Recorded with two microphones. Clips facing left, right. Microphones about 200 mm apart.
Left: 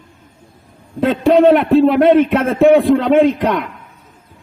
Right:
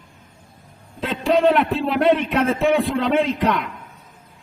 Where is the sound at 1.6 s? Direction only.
55° left (ahead or behind).